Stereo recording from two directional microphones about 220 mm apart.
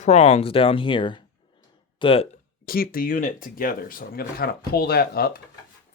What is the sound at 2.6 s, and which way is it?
Speech, 40° left (ahead or behind).